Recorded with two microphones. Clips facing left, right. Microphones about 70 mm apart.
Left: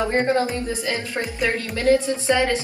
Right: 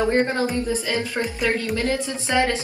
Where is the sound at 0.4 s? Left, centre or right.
Left.